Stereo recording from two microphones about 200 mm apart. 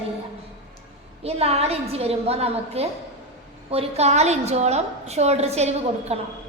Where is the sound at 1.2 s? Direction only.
30° right (ahead or behind).